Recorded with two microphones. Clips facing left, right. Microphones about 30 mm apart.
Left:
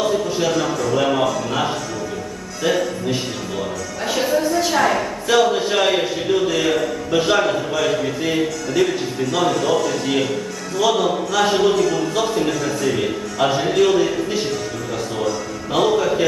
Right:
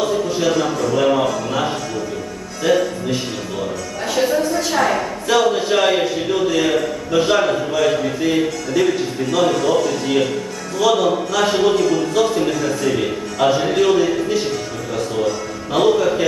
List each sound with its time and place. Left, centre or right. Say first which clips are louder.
0.0 s a sound: right 1 dB; centre
0.9 s music: right 2 dB; centre
2.6 s a man's voice: right 3 dB; centre
15.7 s a man's voice: right 2 dB; centre